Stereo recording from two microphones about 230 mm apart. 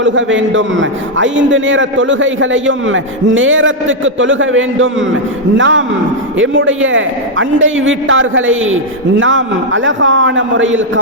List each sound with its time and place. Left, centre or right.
0.0 s a man's voice: right